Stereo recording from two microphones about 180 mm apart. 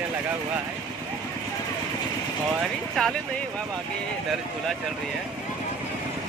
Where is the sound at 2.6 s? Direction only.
Centre (ahead or behind).